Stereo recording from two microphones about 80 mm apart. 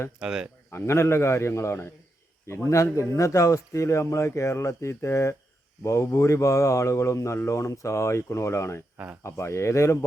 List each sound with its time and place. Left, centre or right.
0.2 s speech: centre
0.7 s a man's voice: left